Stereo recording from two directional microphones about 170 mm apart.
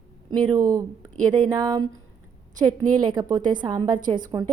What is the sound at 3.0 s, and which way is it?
A woman's voice, 25° right (ahead or behind).